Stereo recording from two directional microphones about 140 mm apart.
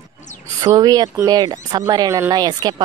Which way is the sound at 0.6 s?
25° right (ahead or behind).